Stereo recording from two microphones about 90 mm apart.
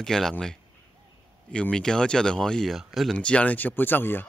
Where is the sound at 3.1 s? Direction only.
10° left (ahead or behind).